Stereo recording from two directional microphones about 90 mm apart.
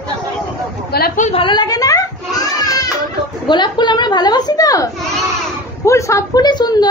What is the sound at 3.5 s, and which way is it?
A woman's voice, 60° left (ahead or behind).